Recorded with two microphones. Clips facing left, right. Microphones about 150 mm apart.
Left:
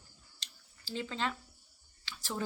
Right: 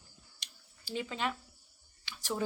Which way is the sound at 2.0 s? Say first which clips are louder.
Right 3 dB; 15° right (ahead or behind).